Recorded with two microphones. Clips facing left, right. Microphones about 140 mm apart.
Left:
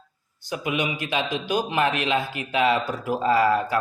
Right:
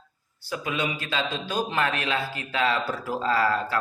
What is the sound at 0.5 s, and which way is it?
A man's voice, 20° left (ahead or behind).